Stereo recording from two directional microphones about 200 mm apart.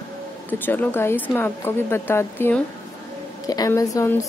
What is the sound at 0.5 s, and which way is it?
Speech, 10° left (ahead or behind).